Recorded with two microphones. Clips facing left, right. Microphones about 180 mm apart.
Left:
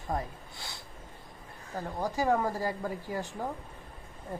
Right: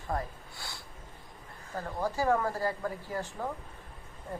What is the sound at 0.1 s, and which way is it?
Speech, 20° left (ahead or behind).